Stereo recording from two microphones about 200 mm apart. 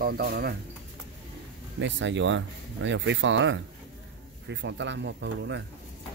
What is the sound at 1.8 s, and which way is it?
Speech, 65° right (ahead or behind).